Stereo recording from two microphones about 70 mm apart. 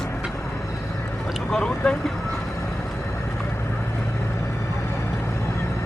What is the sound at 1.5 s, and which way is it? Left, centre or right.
Speech, centre.